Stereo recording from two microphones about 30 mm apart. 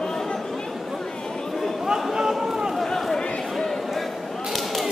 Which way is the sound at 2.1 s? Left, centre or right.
Centre.